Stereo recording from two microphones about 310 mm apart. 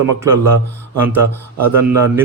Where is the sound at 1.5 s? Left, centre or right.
Right.